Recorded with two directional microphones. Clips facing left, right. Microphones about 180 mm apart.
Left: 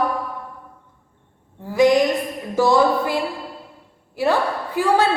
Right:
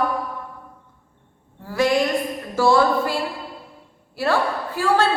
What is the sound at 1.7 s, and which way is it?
A woman's voice, 20° left (ahead or behind).